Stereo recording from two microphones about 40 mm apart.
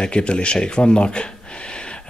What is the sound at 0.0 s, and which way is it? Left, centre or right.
Speech, left.